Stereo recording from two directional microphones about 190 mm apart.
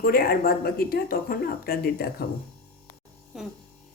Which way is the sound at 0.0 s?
50° left (ahead or behind).